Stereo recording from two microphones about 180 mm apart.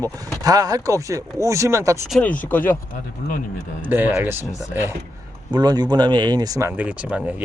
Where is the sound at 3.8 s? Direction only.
10° right (ahead or behind).